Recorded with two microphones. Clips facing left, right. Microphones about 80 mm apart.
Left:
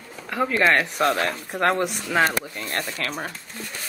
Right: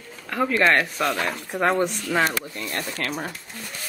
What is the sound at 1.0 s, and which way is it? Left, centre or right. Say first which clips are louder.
Speech: left 3 dB; left.